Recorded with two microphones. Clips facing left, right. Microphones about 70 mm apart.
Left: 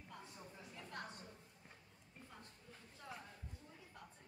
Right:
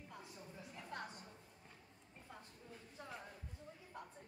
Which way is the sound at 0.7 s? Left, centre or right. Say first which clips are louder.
Right 2 dB; right.